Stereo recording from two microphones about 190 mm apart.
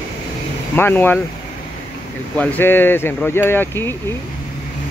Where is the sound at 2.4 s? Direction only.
10° left (ahead or behind).